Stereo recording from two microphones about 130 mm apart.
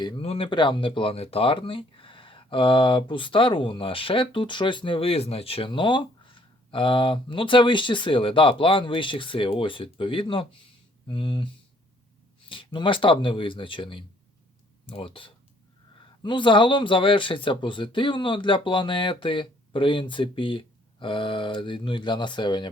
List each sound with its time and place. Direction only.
0.2 s speech: 45° left (ahead or behind)
12.5 s speech: 40° left (ahead or behind)